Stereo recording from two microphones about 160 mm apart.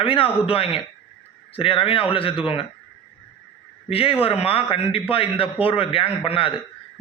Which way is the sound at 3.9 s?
35° left (ahead or behind).